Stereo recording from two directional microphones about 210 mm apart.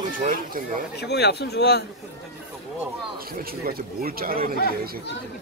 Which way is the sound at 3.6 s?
45° right (ahead or behind).